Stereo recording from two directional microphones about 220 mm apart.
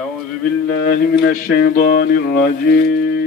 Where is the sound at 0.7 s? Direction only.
45° left (ahead or behind).